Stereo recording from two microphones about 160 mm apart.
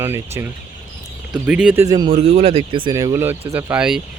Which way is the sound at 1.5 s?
10° right (ahead or behind).